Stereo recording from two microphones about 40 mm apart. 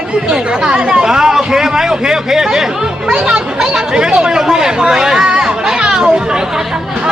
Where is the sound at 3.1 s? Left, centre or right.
Right.